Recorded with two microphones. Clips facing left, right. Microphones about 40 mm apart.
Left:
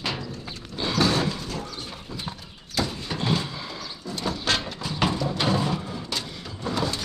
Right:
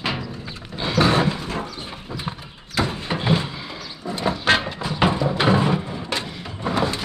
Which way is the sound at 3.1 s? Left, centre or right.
Right.